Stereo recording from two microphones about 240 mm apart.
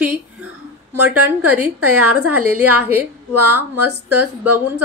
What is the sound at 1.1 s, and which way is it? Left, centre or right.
A woman's voice, right.